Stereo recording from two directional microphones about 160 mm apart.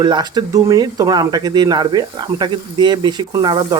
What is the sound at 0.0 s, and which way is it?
Speech, 25° right (ahead or behind).